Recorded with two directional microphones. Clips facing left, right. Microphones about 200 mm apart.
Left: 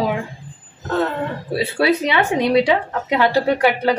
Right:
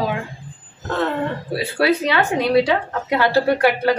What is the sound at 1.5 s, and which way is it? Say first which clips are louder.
Speech: left 1 dB; 20° left (ahead or behind).